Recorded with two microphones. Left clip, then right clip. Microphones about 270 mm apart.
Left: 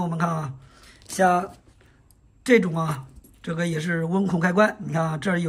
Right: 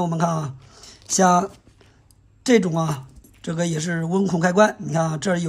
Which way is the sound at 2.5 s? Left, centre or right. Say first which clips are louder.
Right 1 dB; centre.